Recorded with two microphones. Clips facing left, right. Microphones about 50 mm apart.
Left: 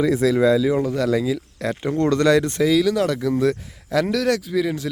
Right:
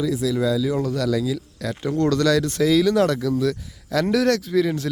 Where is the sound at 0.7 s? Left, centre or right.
Centre.